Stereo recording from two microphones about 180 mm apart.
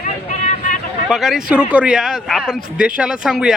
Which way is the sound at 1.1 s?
Centre (ahead or behind).